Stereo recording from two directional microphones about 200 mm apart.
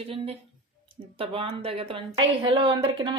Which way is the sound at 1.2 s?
30° right (ahead or behind).